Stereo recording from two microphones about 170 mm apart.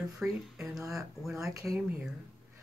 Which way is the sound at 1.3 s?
20° right (ahead or behind).